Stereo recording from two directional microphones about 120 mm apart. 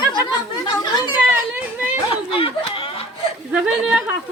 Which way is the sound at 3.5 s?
5° right (ahead or behind).